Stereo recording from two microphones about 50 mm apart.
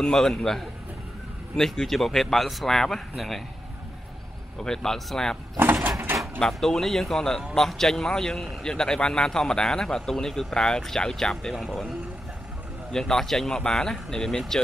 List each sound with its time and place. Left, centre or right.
0.0 s a man's voice: centre
4.6 s speech: centre
5.6 s a sound: right
6.4 s speech: centre
12.9 s speech: centre